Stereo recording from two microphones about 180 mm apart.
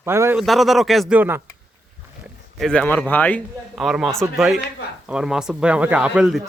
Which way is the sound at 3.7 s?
Centre (ahead or behind).